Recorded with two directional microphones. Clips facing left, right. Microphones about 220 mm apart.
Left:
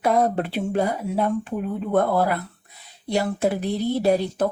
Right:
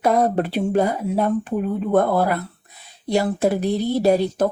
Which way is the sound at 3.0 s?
40° right (ahead or behind).